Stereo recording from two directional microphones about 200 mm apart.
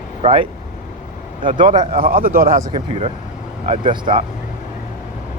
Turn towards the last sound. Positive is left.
turn(degrees=-25)  # may be behind; listen again after turning